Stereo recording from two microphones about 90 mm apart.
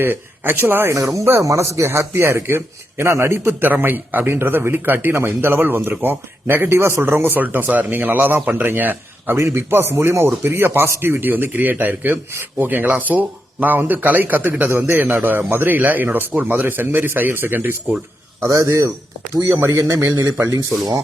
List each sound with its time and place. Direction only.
0.0 s speech: 25° right (ahead or behind)
0.9 s speech: 35° right (ahead or behind)
18.4 s a man's voice: 35° right (ahead or behind)